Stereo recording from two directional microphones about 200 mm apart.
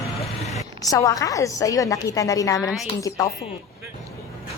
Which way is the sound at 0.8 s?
15° left (ahead or behind).